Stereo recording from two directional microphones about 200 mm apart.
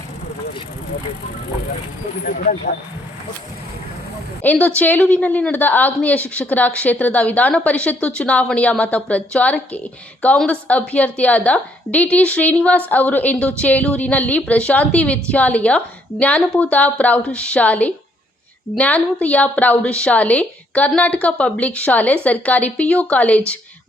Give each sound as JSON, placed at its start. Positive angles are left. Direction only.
{"t": 2.2, "sound": "speech", "side_deg": 45}
{"t": 4.4, "sound": "a woman's voice", "side_deg": 10}